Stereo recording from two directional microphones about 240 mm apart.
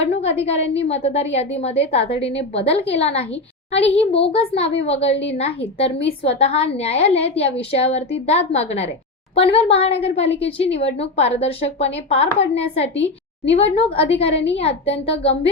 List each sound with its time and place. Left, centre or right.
0.0 s a woman's voice: left